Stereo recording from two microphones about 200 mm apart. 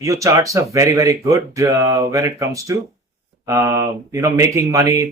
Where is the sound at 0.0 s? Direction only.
15° right (ahead or behind).